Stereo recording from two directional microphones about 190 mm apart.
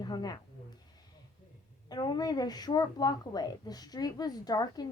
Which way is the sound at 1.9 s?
20° left (ahead or behind).